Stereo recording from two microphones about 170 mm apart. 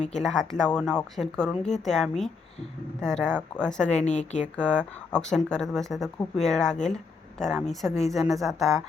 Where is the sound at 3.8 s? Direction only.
45° left (ahead or behind).